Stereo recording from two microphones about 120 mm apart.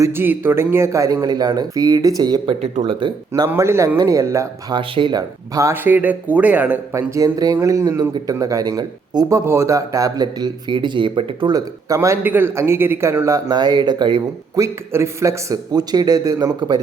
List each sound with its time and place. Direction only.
0.0 s speech: 20° right (ahead or behind); by 2.6 s 35° right (ahead or behind)
2.6 s speech: 60° right (ahead or behind)
3.0 s speech: 35° right (ahead or behind)
3.5 s speech: 25° right (ahead or behind)
4.7 s speech: 45° right (ahead or behind)
5.5 s speech: 20° right (ahead or behind); by 11.5 s 45° right (ahead or behind)
11.9 s speech: 20° right (ahead or behind); by 14.6 s 35° right (ahead or behind)
14.6 s speech: 25° right (ahead or behind)